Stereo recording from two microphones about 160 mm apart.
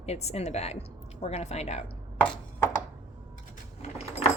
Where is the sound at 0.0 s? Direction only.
40° left (ahead or behind).